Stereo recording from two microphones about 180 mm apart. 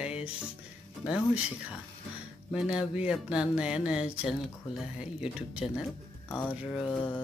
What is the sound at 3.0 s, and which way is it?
Speech, 5° right (ahead or behind).